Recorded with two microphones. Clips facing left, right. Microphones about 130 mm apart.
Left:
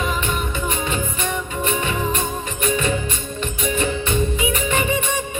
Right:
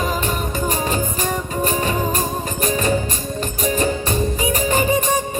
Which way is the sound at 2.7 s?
40° right (ahead or behind).